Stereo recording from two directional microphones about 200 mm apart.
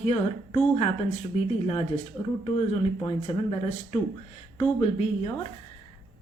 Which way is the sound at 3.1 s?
30° left (ahead or behind).